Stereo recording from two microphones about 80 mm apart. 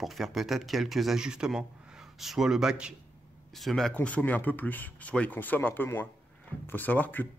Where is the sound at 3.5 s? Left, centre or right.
Centre.